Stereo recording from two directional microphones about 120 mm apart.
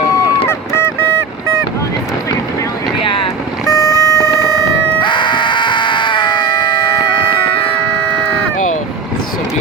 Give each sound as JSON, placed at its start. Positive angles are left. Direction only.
{"t": 0.1, "sound": "honk", "side_deg": 25}
{"t": 3.0, "sound": "boat", "side_deg": 50}
{"t": 3.7, "sound": "vehicle", "side_deg": 30}
{"t": 5.0, "sound": "a sound", "side_deg": 40}